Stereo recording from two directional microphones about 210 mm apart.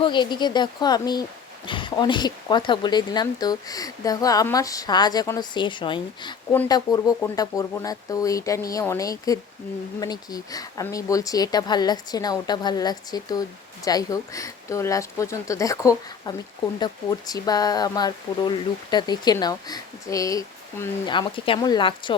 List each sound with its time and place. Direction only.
0.0 s speech: 20° left (ahead or behind)